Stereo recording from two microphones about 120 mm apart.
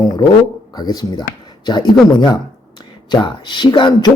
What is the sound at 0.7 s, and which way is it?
Speech, 35° left (ahead or behind).